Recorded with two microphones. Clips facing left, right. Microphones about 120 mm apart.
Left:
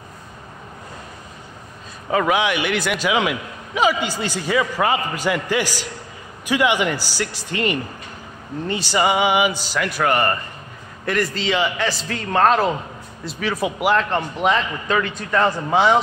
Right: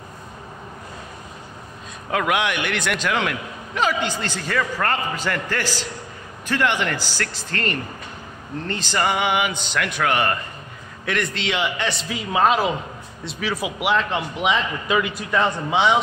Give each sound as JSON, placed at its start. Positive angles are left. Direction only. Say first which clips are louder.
{"t": 2.0, "sound": "a man's voice", "louder": "left 3 dB", "side_deg": 0}
{"t": 15.3, "sound": "a man's voice", "louder": "left 3 dB", "side_deg": 0}